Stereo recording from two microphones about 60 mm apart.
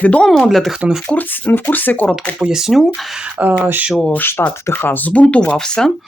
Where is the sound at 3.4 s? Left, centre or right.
Right.